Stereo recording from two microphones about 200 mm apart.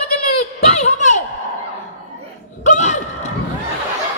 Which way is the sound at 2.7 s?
35° left (ahead or behind).